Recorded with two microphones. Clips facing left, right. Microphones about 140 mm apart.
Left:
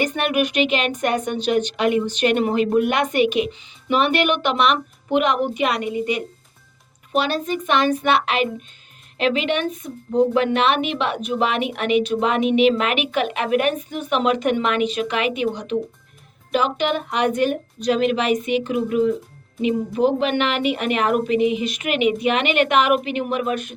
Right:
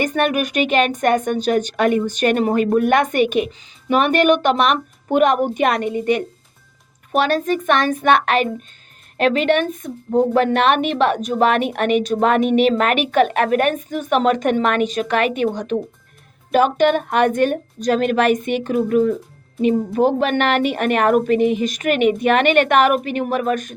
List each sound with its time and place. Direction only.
0.0 s speech: 45° right (ahead or behind)
7.1 s speech: 50° right (ahead or behind)